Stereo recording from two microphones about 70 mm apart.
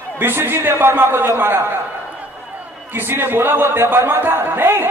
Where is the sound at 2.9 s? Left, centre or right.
Right.